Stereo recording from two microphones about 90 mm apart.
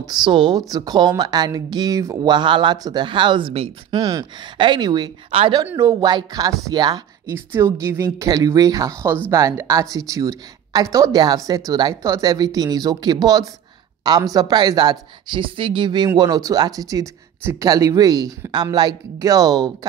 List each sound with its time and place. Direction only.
0.0 s speech: 50° right (ahead or behind); by 3.7 s 85° right
3.9 s speech: 45° right (ahead or behind)
4.6 s speech: 60° right (ahead or behind)
5.3 s speech: 90° right
5.8 s speech: 45° right (ahead or behind)
7.3 s speech: 30° right (ahead or behind); by 16.1 s 60° right (ahead or behind)
16.2 s speech: 45° right (ahead or behind)
17.4 s speech: 25° right (ahead or behind)
17.6 s speech: 40° right (ahead or behind)